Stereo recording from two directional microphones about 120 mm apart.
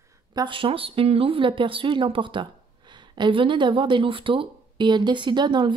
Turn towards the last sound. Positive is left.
turn(degrees=-40)  # may be behind; listen again after turning